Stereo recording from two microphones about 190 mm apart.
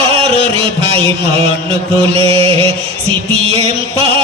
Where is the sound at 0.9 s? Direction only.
30° right (ahead or behind).